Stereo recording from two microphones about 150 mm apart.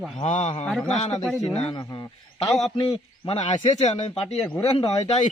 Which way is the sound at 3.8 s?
50° left (ahead or behind).